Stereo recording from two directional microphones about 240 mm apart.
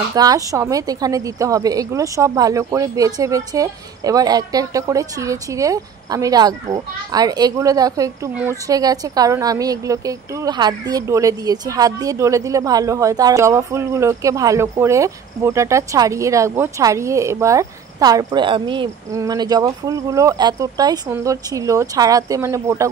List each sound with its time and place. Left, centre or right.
0.1 s a woman's voice: centre